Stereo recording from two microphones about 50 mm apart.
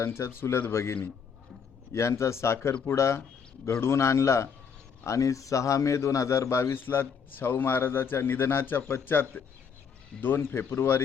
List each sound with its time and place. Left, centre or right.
0.0 s speech: left
1.9 s a man's voice: left
3.7 s a man's voice: left
5.0 s a man's voice: left
6.7 s a man's voice: left